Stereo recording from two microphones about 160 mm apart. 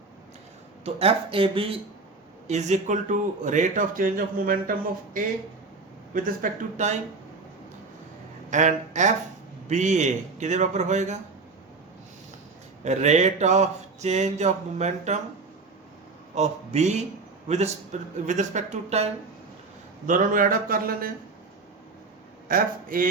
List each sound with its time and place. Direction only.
0.9 s speech: 40° right (ahead or behind)
2.5 s speech: 45° right (ahead or behind)
6.1 s speech: 60° right (ahead or behind)
8.4 s speech: 50° right (ahead or behind)
12.8 s speech: 45° right (ahead or behind)
16.3 s speech: 45° right (ahead or behind)
20.1 s speech: 55° right (ahead or behind)
22.4 s speech: 60° right (ahead or behind)